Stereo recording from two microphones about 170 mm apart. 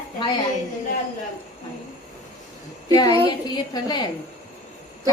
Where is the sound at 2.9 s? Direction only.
20° left (ahead or behind).